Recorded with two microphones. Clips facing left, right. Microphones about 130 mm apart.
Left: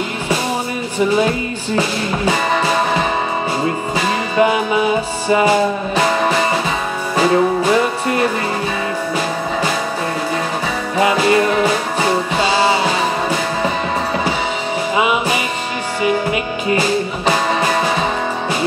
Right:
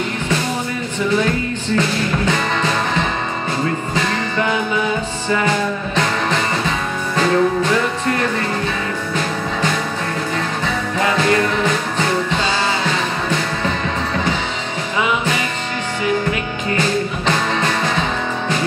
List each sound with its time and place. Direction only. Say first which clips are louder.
0.9 s music: left 3 dB; 20° left (ahead or behind)
11.0 s music: left 3 dB; 15° left (ahead or behind)
15.0 s music: left 1 dB; 15° left (ahead or behind)